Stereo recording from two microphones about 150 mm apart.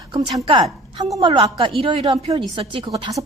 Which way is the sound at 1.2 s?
35° right (ahead or behind).